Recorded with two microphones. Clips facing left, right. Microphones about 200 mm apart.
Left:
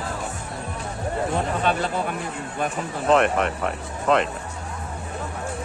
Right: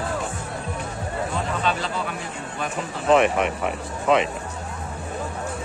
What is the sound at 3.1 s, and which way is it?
Speech, 5° right (ahead or behind).